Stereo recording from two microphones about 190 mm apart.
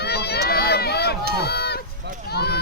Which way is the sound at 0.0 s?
60° left (ahead or behind).